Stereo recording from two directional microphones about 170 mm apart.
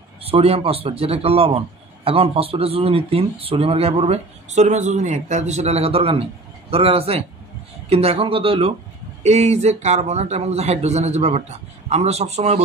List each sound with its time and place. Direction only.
0.2 s speech: 35° right (ahead or behind)